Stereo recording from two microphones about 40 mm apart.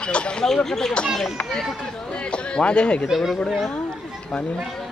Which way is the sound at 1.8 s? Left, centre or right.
Left.